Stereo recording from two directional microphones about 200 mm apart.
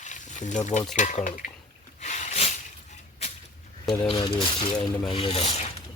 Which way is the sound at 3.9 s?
20° left (ahead or behind).